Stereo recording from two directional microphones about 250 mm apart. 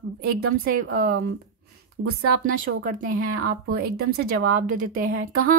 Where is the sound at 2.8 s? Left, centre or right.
Right.